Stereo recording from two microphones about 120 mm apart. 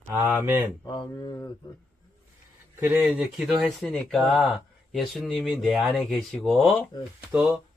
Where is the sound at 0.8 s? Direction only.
40° left (ahead or behind).